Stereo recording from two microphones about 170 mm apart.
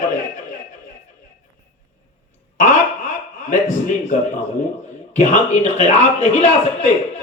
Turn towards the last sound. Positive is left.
turn(degrees=40)  # may be behind; listen again after turning